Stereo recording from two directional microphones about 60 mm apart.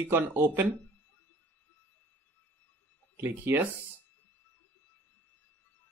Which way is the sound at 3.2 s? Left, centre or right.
Right.